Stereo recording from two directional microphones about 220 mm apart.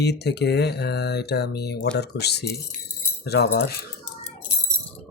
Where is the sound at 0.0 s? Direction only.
50° left (ahead or behind).